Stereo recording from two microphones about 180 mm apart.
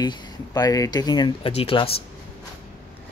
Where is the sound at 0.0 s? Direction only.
20° left (ahead or behind).